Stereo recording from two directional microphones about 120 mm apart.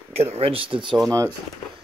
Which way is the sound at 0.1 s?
60° right (ahead or behind).